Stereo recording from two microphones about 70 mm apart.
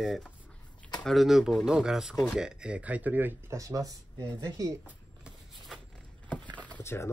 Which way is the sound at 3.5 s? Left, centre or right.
Right.